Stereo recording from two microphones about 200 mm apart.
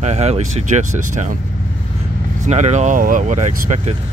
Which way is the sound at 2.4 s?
35° right (ahead or behind).